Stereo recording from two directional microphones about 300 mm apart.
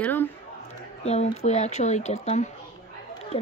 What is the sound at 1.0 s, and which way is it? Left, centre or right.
Speech, left.